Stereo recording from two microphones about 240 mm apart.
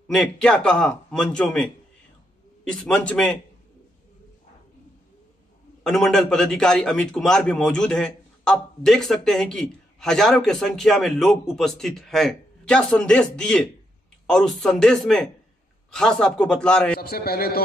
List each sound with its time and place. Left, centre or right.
0.1 s a man's voice: centre
2.7 s a man's voice: centre
5.9 s a man's voice: centre
17.0 s a man's voice: left